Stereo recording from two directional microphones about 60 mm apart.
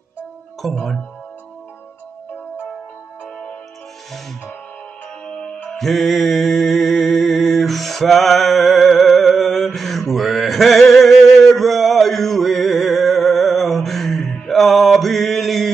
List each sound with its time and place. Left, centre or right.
0.6 s speech: centre
5.2 s music: centre
5.8 s mantra: centre